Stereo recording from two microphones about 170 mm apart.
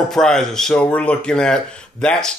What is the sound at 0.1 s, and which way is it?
Speech, 5° left (ahead or behind).